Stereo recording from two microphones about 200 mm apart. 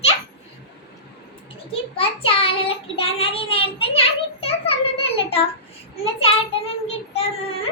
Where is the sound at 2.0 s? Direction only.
30° left (ahead or behind).